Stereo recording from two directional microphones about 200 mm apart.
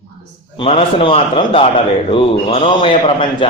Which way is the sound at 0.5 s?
30° left (ahead or behind).